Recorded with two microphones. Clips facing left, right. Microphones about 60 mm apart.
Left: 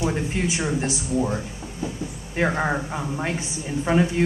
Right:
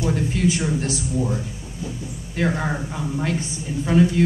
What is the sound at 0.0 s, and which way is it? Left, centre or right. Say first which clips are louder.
A man's voice: right 3 dB; left.